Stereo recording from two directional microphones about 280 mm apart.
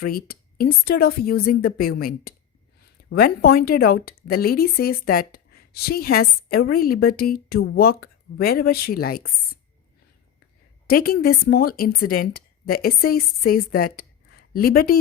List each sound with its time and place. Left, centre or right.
0.0 s a woman's voice: left
10.8 s a woman's voice: left